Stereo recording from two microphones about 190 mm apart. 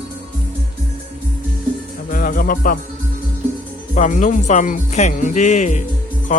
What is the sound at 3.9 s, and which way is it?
Speech, 40° left (ahead or behind).